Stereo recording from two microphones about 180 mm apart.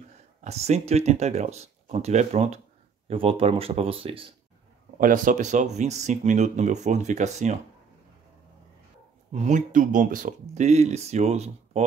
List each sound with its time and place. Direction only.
0.4 s speech: 35° right (ahead or behind)
4.9 s speech: 50° right (ahead or behind)
9.3 s speech: 40° right (ahead or behind)